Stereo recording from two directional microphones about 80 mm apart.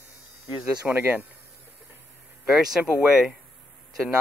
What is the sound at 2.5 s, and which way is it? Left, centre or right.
Speech, centre.